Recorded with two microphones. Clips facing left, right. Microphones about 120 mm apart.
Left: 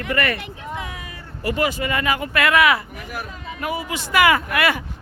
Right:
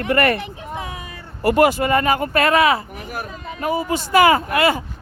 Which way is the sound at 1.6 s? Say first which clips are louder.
Right 6 dB; 45° right (ahead or behind).